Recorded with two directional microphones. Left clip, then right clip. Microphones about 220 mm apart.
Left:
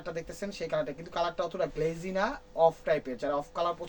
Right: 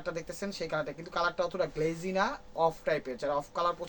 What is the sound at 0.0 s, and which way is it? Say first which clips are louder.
Speech: even; 25° right (ahead or behind).